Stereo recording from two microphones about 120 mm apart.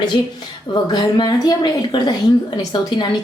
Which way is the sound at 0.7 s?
35° left (ahead or behind).